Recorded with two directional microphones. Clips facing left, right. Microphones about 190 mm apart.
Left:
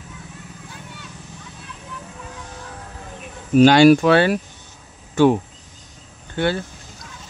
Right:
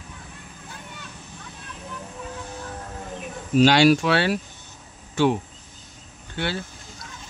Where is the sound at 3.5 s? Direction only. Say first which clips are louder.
Left 5 dB; 50° left (ahead or behind).